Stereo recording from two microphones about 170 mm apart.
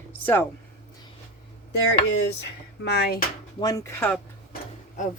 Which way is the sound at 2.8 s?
70° left (ahead or behind).